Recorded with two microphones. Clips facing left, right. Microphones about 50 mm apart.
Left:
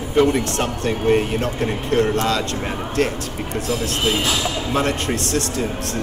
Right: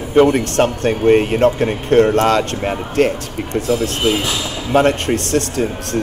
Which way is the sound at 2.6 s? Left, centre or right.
Right.